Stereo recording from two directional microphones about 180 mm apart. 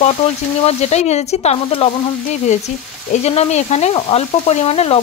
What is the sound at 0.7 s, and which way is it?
Sizzle, 40° left (ahead or behind).